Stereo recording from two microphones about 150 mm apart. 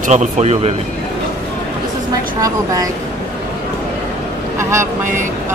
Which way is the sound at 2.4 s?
25° right (ahead or behind).